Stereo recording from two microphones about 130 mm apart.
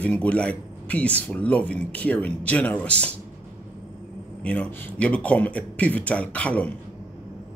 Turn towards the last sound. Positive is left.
turn(degrees=10)  # may be behind; listen again after turning